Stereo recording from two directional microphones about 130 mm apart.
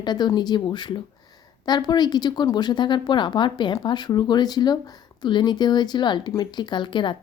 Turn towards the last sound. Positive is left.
turn(degrees=35)  # may be behind; listen again after turning